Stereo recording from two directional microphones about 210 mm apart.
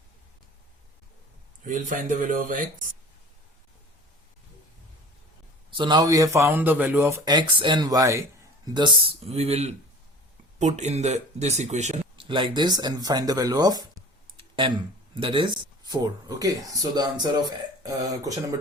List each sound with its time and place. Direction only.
1.6 s speech: 40° right (ahead or behind)
5.7 s speech: 20° right (ahead or behind)